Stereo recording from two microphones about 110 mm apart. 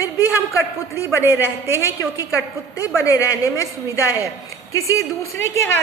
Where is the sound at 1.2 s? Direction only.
20° right (ahead or behind).